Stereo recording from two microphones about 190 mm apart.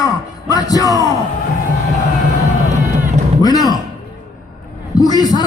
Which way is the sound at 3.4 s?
20° left (ahead or behind).